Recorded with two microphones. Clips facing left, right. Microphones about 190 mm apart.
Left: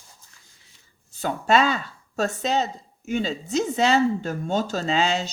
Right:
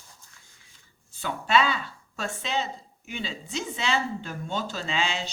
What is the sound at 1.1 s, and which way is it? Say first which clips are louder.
Speech: left 4 dB; 40° left (ahead or behind).